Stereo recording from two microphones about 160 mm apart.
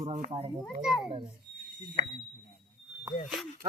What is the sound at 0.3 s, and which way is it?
Speech, 35° right (ahead or behind).